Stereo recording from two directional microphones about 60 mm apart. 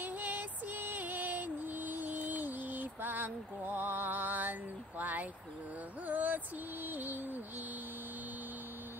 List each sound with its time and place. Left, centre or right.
0.0 s female singing: right
6.0 s music: right